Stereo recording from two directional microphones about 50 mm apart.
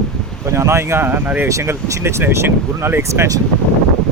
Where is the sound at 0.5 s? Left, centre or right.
Right.